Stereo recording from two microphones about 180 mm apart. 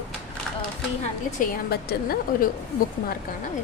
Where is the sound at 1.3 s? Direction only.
55° left (ahead or behind).